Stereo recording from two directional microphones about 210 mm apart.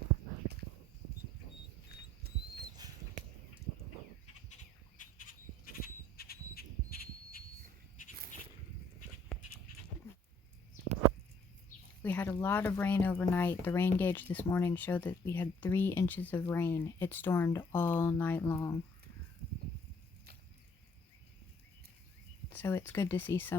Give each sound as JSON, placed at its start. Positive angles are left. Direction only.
{"t": 2.3, "sound": "rodents", "side_deg": -45}
{"t": 2.8, "sound": "rodents", "side_deg": -20}
{"t": 4.9, "sound": "a sound", "side_deg": 40}
{"t": 12.0, "sound": "speech", "side_deg": 5}
{"t": 22.5, "sound": "speech", "side_deg": 10}